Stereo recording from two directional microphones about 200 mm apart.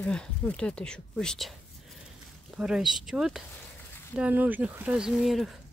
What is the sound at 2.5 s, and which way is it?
Speech, centre (ahead or behind).